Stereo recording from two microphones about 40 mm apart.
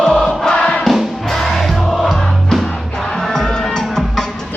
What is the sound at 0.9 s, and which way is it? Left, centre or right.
Music, centre.